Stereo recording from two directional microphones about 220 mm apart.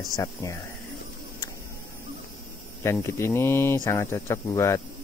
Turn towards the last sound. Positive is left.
turn(degrees=15)  # may be behind; listen again after turning